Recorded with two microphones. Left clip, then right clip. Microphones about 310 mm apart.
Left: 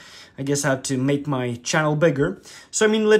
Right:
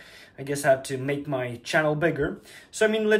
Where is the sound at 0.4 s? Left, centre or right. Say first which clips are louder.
Even; left.